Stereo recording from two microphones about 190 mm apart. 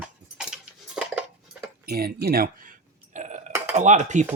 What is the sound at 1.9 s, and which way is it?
Speech, 55° right (ahead or behind).